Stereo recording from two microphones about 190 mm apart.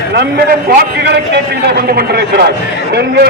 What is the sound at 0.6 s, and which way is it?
A man's voice, 60° right (ahead or behind).